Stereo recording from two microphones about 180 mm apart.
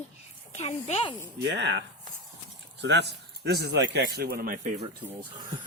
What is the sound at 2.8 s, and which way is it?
A man's voice, 70° right (ahead or behind).